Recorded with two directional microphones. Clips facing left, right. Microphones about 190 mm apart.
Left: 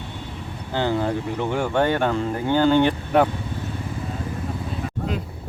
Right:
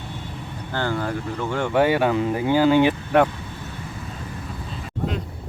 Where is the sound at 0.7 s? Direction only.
20° left (ahead or behind).